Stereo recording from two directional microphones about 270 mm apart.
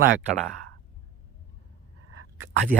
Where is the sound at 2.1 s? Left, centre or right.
Right.